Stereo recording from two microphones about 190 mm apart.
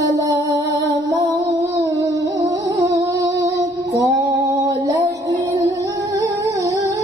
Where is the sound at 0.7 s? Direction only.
65° right (ahead or behind).